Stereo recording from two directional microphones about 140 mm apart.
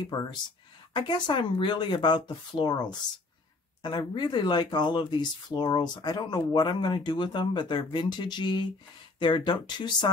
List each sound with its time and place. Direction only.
0.0 s speech: 30° left (ahead or behind)